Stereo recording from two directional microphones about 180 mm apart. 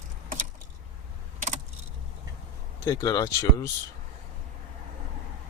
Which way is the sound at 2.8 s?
20° left (ahead or behind).